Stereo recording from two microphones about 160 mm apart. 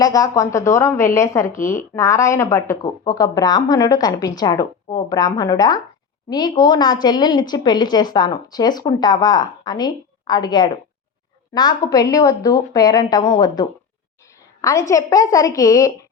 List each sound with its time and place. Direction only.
0.0 s a woman's voice: 25° left (ahead or behind)